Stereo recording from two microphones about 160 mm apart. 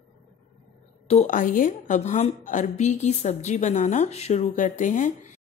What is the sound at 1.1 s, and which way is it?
A woman's voice, 50° left (ahead or behind).